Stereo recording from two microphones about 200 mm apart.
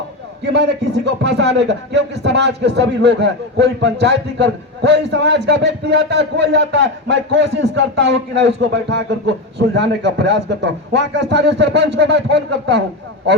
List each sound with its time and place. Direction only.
0.5 s speech: 60° right (ahead or behind)